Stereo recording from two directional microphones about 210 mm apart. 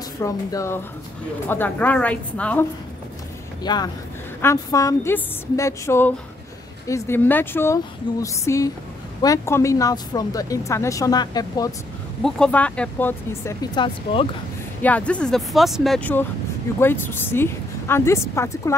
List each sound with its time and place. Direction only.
0.2 s speech: 15° left (ahead or behind)
3.6 s speech: 20° left (ahead or behind)
12.2 s speech: 5° left (ahead or behind); by 14.2 s 20° left (ahead or behind)
14.8 s speech: 5° left (ahead or behind)